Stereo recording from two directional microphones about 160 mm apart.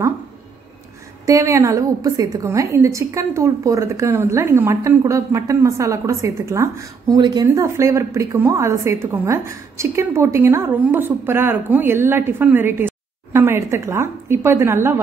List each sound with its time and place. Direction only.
1.2 s a woman's voice: 20° right (ahead or behind)